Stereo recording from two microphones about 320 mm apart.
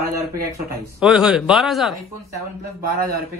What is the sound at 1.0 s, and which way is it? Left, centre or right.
Speech, centre.